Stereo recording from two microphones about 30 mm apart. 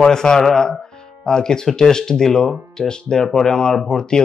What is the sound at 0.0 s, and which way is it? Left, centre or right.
Speech, left.